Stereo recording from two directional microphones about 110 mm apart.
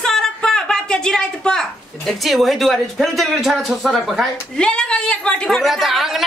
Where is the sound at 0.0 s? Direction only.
5° left (ahead or behind).